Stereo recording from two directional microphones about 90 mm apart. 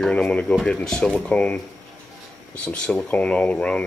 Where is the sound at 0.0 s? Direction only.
10° left (ahead or behind).